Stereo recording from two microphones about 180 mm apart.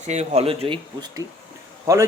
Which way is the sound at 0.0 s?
40° right (ahead or behind).